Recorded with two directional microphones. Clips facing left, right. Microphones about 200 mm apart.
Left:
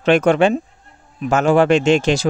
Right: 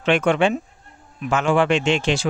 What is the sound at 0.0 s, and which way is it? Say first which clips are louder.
Speech: left 4 dB; 40° left (ahead or behind).